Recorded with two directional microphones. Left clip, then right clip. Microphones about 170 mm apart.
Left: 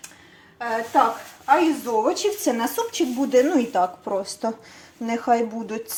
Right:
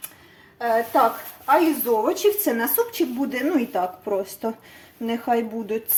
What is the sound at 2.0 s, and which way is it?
Speech, 5° left (ahead or behind).